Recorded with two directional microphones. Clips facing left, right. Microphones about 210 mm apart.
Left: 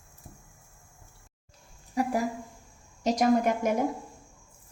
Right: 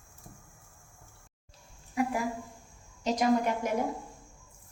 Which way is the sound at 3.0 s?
45° left (ahead or behind).